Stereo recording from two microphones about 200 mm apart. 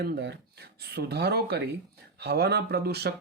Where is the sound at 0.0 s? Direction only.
55° right (ahead or behind).